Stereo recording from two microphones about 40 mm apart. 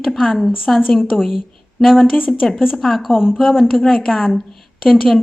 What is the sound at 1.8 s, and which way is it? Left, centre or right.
Speech, centre.